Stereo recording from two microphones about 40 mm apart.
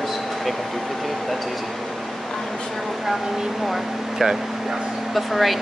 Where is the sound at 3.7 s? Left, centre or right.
Centre.